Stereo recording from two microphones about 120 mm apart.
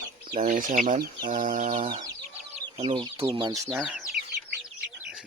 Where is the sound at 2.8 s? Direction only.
40° right (ahead or behind).